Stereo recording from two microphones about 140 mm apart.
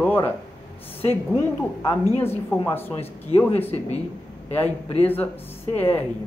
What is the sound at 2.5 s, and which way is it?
Speech, 15° left (ahead or behind).